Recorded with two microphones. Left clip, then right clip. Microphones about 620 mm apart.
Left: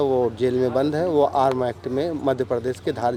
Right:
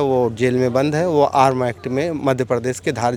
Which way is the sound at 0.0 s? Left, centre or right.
Right.